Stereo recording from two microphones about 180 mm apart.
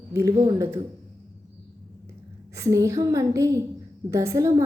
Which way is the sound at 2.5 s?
15° right (ahead or behind).